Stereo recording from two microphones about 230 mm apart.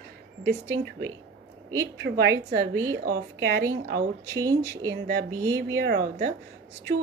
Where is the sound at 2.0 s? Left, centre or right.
Right.